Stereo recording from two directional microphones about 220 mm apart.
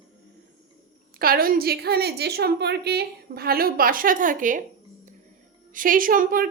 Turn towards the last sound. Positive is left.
turn(degrees=-40)  # may be behind; listen again after turning